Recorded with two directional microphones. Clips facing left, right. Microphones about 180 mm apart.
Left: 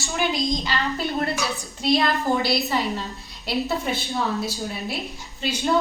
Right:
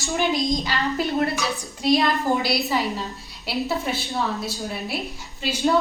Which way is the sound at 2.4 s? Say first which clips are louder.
Even; 10° right (ahead or behind).